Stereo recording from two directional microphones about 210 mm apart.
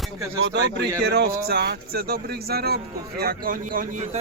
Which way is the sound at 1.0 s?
50° right (ahead or behind).